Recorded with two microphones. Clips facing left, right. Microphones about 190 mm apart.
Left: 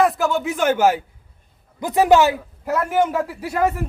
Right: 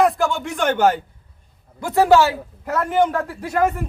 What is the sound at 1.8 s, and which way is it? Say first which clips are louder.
A man's voice: even; 20° left (ahead or behind).